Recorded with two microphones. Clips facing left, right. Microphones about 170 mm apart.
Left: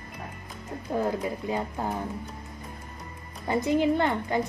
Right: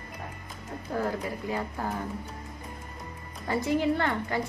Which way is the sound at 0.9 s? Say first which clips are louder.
Left 3 dB; 20° left (ahead or behind).